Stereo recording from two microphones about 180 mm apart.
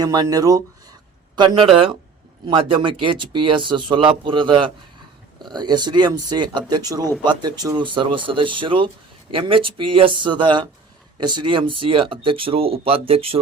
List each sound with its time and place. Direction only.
0.0 s speech: 20° right (ahead or behind)